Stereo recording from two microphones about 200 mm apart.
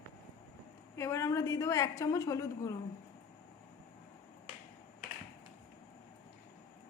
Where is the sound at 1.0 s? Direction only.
15° left (ahead or behind).